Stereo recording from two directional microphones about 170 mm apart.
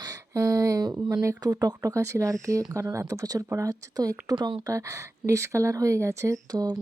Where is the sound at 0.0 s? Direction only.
20° right (ahead or behind).